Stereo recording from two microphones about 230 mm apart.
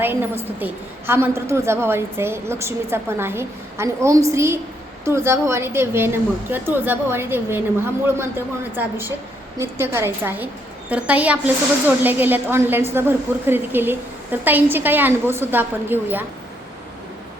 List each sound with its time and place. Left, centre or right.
0.0 s a woman's voice: centre